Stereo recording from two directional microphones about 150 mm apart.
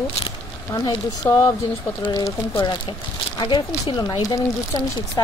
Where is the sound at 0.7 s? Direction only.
20° left (ahead or behind).